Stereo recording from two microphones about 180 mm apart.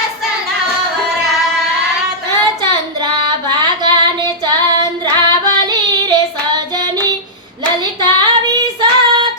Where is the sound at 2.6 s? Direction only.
25° right (ahead or behind).